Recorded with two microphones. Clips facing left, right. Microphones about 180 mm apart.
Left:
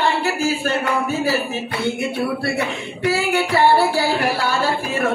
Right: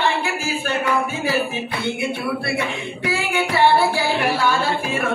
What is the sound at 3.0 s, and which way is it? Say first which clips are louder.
Child singing: left 4 dB; 40° left (ahead or behind).